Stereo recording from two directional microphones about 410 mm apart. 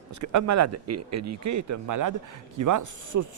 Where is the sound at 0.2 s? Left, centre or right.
Right.